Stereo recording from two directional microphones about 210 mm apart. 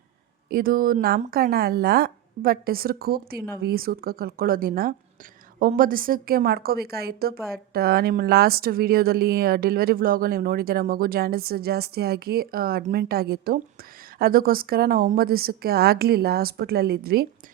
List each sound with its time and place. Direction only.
0.5 s speech: 45° right (ahead or behind)